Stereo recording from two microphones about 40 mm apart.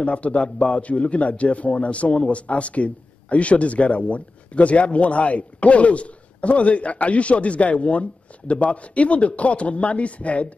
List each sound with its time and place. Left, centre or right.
0.0 s a man's voice: left